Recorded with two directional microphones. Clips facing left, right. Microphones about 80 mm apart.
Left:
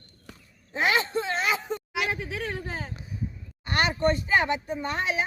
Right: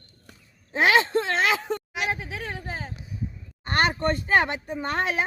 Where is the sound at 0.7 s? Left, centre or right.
Right.